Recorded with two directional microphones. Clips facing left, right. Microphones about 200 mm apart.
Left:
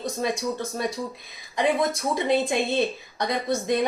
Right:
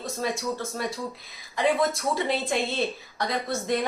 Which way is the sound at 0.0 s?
20° left (ahead or behind).